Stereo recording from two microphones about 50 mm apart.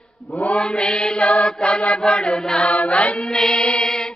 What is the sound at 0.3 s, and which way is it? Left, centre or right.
Mantra, left.